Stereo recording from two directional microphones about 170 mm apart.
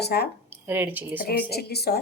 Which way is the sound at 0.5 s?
10° right (ahead or behind).